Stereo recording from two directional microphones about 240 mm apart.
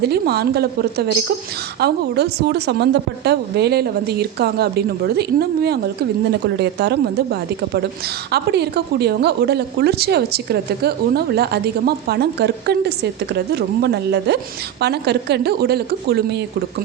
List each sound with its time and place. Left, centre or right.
0.0 s a woman's voice: right